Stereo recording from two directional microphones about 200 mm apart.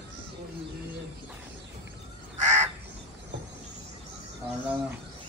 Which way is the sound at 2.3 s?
35° right (ahead or behind).